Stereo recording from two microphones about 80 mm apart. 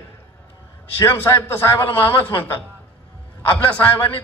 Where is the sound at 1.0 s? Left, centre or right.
Left.